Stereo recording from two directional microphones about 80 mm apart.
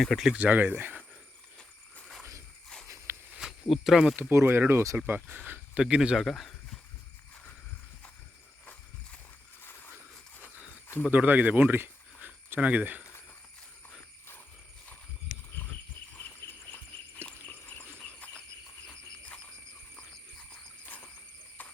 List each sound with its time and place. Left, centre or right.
0.0 s speech: centre
0.3 s speech: right
2.8 s walk: right
3.3 s speech: centre
4.2 s speech: right
5.7 s speech: centre
9.6 s a sound: left
11.1 s speech: right
16.4 s a sound: left
20.5 s frog: centre
21.6 s clip-clop: left